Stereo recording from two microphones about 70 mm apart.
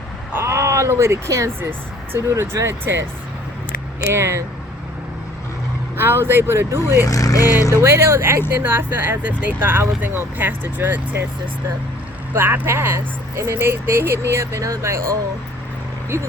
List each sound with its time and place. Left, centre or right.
0.3 s speech: right
4.1 s speech: right
6.0 s speech: right
6.9 s speech: left
7.7 s speech: right
12.3 s speech: right